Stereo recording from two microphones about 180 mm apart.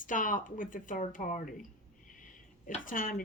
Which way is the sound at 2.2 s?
45° left (ahead or behind).